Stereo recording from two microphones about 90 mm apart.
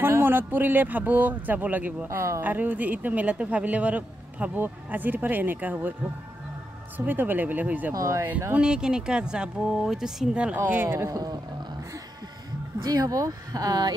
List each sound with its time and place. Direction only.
0.0 s speech: 25° right (ahead or behind)
2.0 s speech: 35° right (ahead or behind)
2.4 s speech: 20° right (ahead or behind)
7.1 s speech: 20° right (ahead or behind)
7.9 s speech: 35° right (ahead or behind)
8.5 s speech: 10° right (ahead or behind)
10.5 s speech: 20° right (ahead or behind)
11.1 s speech: 40° right (ahead or behind)
12.8 s speech: 45° right (ahead or behind)